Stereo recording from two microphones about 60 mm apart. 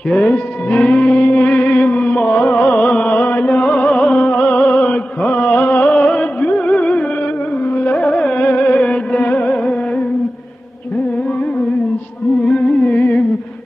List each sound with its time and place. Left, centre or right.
0.2 s music: left
12.4 s music: centre